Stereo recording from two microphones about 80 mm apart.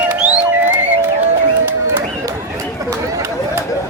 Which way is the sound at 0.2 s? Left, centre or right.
Centre.